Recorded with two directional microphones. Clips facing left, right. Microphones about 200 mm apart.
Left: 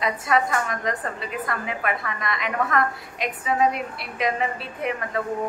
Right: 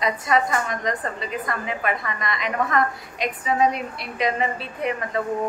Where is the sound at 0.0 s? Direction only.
5° left (ahead or behind).